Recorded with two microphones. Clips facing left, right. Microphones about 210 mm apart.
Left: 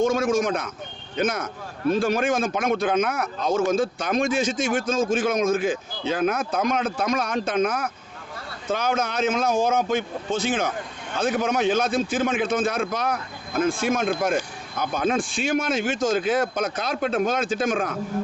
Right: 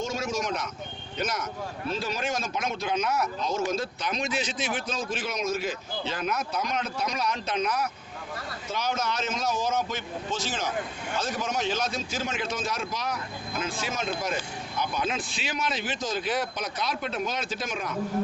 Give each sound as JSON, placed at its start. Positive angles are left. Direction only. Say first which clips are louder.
{"t": 0.0, "sound": "speech", "louder": "left 9 dB", "side_deg": 55}